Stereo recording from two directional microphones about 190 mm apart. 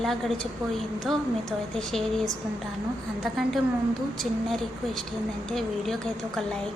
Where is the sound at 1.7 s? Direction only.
Centre (ahead or behind).